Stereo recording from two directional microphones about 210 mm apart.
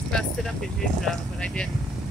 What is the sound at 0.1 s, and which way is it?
Speech, centre (ahead or behind).